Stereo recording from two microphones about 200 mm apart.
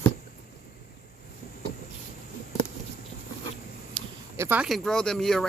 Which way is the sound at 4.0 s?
25° right (ahead or behind).